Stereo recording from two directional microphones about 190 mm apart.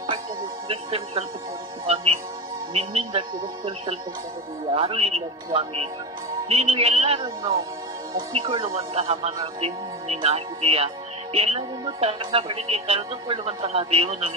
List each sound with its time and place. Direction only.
0.7 s speech: 30° right (ahead or behind)
2.7 s speech: 30° right (ahead or behind)